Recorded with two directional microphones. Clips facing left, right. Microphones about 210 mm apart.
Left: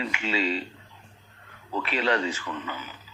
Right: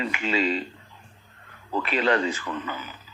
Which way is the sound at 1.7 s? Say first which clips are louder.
Right 3 dB; 50° right (ahead or behind).